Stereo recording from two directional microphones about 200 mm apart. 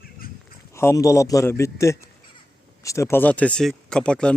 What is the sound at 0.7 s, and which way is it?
Speech, 15° left (ahead or behind).